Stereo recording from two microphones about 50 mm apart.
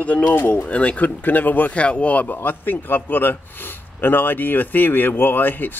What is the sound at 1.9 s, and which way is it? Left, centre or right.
A man's voice, left.